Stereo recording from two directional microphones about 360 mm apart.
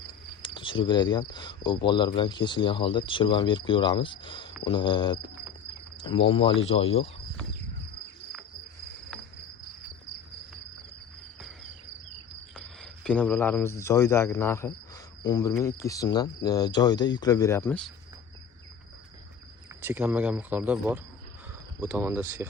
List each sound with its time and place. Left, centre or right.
0.1 s cricket: centre
12.5 s speech: centre
15.2 s cricket: centre
19.8 s speech: centre